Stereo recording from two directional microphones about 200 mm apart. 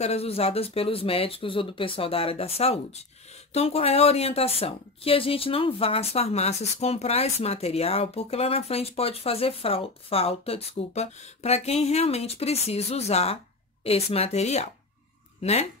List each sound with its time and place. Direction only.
0.0 s a woman's voice: 30° left (ahead or behind)